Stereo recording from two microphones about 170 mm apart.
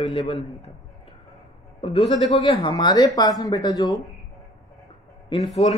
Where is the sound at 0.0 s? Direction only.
30° left (ahead or behind).